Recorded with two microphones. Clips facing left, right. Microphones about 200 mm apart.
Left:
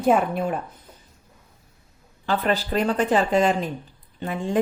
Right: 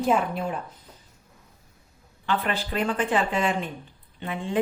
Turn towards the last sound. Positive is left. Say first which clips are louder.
# left 4 dB
turn(degrees=40)  # may be behind; listen again after turning